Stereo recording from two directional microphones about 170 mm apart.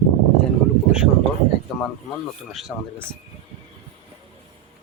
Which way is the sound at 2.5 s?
Centre (ahead or behind).